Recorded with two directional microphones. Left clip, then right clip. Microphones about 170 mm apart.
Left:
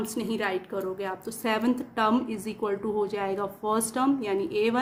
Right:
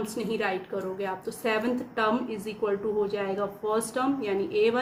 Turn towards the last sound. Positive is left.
turn(degrees=45)  # may be behind; listen again after turning